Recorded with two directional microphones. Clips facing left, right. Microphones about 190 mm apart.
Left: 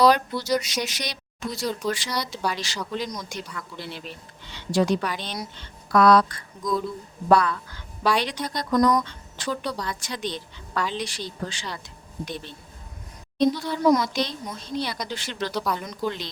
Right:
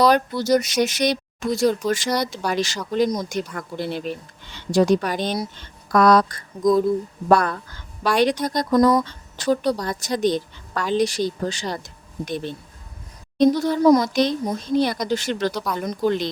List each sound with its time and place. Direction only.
0.1 s a woman's voice: 45° right (ahead or behind)
8.7 s speech: 30° right (ahead or behind)
9.0 s a woman's voice: 40° right (ahead or behind)
13.4 s a woman's voice: 45° right (ahead or behind)
15.5 s speech: centre (ahead or behind)
15.8 s a woman's voice: 45° right (ahead or behind)